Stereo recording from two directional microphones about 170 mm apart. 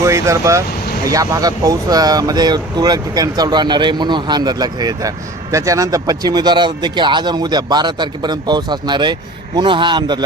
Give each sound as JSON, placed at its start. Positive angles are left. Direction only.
{"t": 0.0, "sound": "speech", "side_deg": -15}